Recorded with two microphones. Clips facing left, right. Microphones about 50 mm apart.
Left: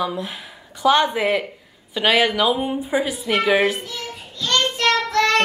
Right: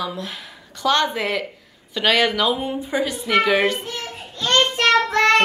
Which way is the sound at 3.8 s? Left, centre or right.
Right.